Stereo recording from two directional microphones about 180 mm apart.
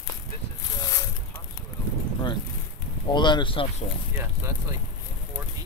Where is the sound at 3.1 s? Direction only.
25° left (ahead or behind).